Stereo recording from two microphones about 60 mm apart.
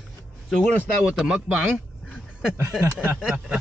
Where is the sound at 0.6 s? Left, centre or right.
Left.